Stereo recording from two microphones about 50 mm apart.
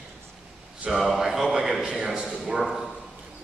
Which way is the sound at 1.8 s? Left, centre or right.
Centre.